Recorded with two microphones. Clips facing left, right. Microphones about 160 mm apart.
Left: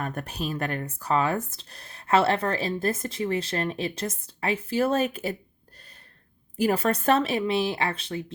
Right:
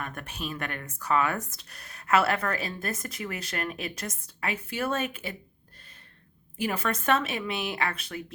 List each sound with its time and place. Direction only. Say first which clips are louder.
0.0 s speech: left 5 dB; 35° left (ahead or behind)
6.6 s speech: left 6 dB; 35° left (ahead or behind)